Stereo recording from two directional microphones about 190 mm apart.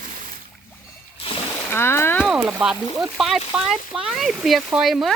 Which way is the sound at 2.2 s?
5° right (ahead or behind).